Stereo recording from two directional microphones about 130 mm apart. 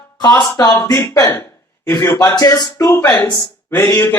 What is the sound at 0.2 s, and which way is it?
Speech, 25° left (ahead or behind).